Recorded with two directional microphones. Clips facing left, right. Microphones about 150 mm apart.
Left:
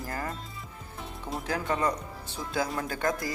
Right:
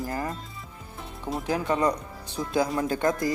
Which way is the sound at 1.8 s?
15° right (ahead or behind).